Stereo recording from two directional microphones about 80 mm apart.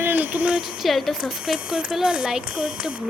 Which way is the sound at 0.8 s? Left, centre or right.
Centre.